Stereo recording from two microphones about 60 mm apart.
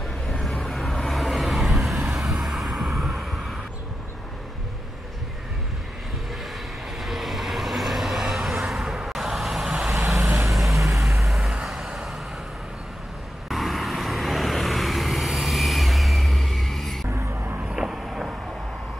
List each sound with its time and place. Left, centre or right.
0.3 s vehicle: centre
7.0 s vehicle: centre
10.7 s vehicle: right
11.2 s vehicle: centre
13.5 s vehicle: centre
17.1 s a sound: right
17.7 s vehicle: centre